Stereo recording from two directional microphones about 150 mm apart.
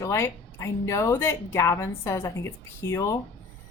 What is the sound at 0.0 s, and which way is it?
Speech, 20° left (ahead or behind).